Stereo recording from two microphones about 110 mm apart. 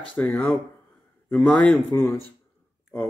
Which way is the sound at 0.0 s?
10° left (ahead or behind).